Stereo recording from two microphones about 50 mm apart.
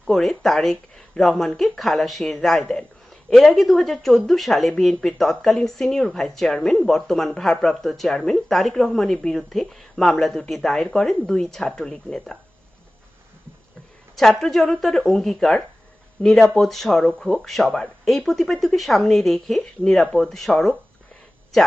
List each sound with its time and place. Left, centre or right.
0.1 s speech: centre
14.2 s speech: centre